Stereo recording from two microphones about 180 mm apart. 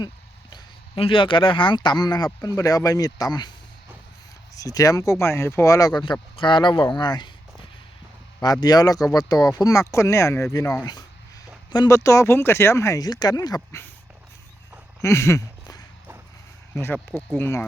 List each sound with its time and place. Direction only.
0.5 s speech: 30° left (ahead or behind)
4.5 s speech: 20° left (ahead or behind)
8.6 s speech: 20° left (ahead or behind)
15.0 s a sound: 15° left (ahead or behind)
16.7 s speech: 10° left (ahead or behind)